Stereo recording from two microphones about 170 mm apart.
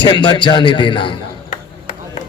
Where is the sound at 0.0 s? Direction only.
30° left (ahead or behind).